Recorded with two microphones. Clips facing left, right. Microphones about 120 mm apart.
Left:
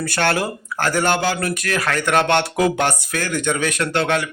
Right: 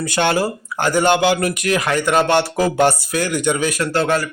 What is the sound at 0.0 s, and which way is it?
Speech, 15° right (ahead or behind).